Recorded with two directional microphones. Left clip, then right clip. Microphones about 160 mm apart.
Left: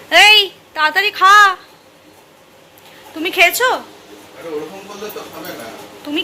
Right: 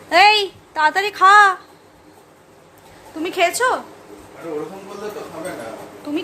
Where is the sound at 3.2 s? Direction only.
Centre (ahead or behind).